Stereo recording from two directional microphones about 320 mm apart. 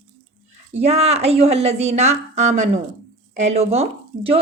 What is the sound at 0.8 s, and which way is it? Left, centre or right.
A woman's voice, centre.